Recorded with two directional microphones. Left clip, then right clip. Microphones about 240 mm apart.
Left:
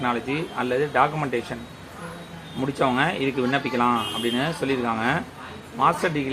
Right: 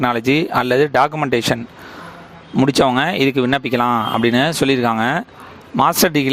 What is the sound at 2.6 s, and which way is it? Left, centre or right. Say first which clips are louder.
Speech: right 8 dB; right.